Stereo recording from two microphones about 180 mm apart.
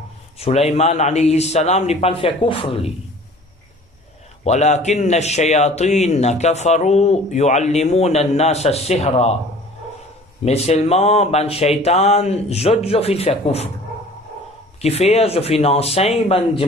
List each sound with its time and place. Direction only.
0.4 s a man's voice: 35° left (ahead or behind)
4.5 s a man's voice: 40° left (ahead or behind)
10.4 s a man's voice: 35° left (ahead or behind)
14.8 s a man's voice: 35° left (ahead or behind)